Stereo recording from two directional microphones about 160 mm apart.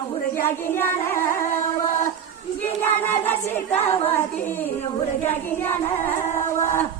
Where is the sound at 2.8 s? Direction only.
10° left (ahead or behind).